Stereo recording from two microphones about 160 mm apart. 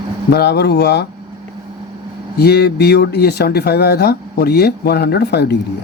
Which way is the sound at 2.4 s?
90° left.